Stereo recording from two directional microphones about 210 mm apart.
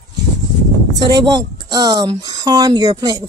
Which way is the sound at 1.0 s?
20° right (ahead or behind).